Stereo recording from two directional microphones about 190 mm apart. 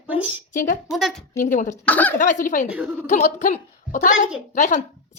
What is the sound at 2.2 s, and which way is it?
A woman's voice, 45° left (ahead or behind).